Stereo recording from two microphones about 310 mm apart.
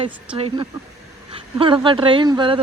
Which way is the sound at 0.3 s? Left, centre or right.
Centre.